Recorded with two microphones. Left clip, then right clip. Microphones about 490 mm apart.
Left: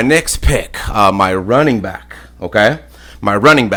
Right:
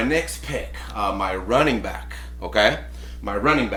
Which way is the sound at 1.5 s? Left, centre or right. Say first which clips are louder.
Left 7 dB; left.